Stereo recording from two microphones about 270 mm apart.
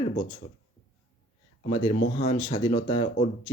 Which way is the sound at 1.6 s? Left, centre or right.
Left.